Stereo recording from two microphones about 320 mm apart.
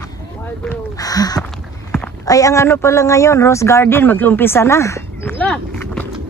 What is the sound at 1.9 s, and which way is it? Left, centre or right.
Speech, centre.